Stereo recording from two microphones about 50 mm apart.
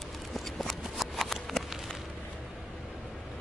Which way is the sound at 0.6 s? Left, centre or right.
Centre.